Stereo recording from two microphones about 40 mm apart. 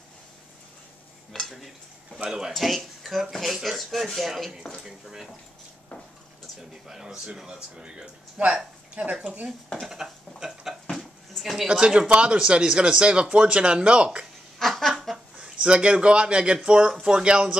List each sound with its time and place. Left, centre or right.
1.5 s speech: centre
4.8 s speech: centre
6.9 s speech: centre
7.8 s speech: right
8.4 s speech: right
9.8 s a sound: centre
10.9 s dishes: centre
11.6 s speech: centre
14.6 s a sound: centre
15.3 s a man's voice: right